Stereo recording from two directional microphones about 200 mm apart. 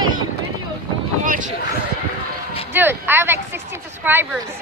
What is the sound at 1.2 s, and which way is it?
Speech, 40° right (ahead or behind).